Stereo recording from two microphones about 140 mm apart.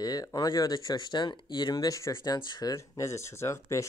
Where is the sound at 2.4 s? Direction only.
30° left (ahead or behind).